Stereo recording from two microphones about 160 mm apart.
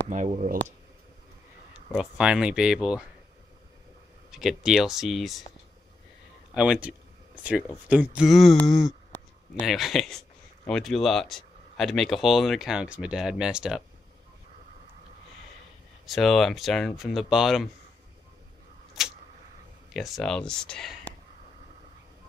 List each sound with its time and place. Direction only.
0.1 s speech: 50° right (ahead or behind)
2.0 s speech: 5° right (ahead or behind)
4.3 s speech: centre (ahead or behind)
6.5 s speech: 5° right (ahead or behind)
16.1 s speech: centre (ahead or behind)
19.9 s speech: centre (ahead or behind)